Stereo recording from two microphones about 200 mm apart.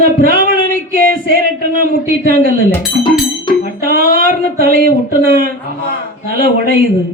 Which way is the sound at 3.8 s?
50° right (ahead or behind).